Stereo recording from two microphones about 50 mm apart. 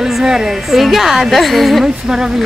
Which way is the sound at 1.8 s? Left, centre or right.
Centre.